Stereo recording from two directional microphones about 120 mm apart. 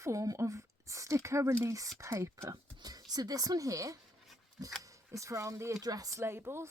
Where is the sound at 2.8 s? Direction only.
35° right (ahead or behind).